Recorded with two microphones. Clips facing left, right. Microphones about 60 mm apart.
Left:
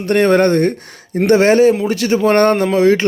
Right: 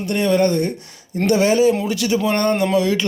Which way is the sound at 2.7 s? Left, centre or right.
Left.